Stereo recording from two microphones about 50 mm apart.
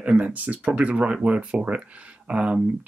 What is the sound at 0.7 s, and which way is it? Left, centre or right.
Speech, right.